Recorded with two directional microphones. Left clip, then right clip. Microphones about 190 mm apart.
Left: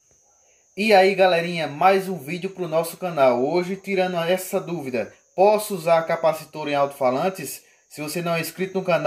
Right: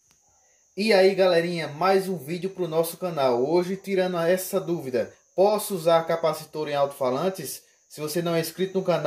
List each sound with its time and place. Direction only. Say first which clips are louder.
0.8 s speech: left 3 dB; 30° right (ahead or behind)